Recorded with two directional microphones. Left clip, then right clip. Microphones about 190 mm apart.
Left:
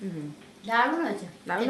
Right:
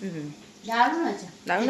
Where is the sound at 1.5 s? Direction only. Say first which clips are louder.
Right 4 dB; 5° right (ahead or behind).